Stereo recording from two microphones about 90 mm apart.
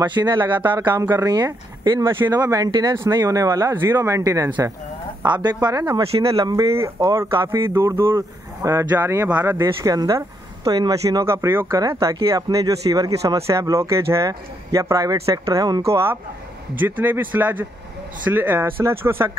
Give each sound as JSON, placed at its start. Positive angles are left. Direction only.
{"t": 0.0, "sound": "speech", "side_deg": -55}
{"t": 1.2, "sound": "speech", "side_deg": -50}
{"t": 2.0, "sound": "speech", "side_deg": -25}
{"t": 2.3, "sound": "a woman's voice", "side_deg": -45}
{"t": 3.7, "sound": "speech", "side_deg": -25}
{"t": 5.2, "sound": "a woman's voice", "side_deg": -55}
{"t": 6.5, "sound": "speech", "side_deg": -30}
{"t": 9.6, "sound": "speech", "side_deg": -40}
{"t": 11.2, "sound": "speech", "side_deg": -30}
{"t": 15.8, "sound": "speech", "side_deg": -30}